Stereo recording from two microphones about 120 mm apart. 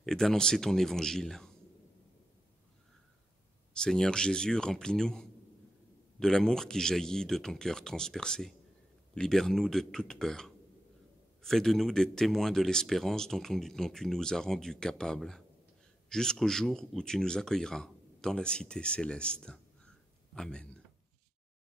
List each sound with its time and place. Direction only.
0.0 s speech: 5° left (ahead or behind)
3.7 s speech: 5° left (ahead or behind)